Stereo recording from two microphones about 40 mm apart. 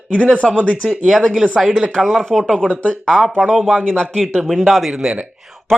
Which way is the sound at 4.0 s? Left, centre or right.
Centre.